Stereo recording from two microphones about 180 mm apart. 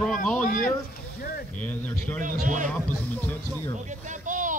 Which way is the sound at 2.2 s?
45° right (ahead or behind).